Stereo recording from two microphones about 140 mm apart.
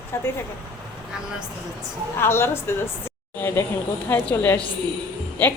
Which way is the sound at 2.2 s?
15° left (ahead or behind).